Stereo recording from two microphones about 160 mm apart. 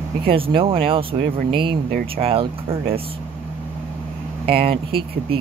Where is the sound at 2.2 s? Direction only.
35° right (ahead or behind).